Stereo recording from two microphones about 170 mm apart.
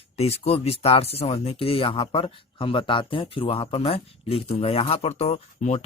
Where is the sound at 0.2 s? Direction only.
35° left (ahead or behind).